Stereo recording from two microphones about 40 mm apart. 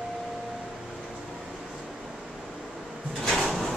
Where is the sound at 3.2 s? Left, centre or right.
Centre.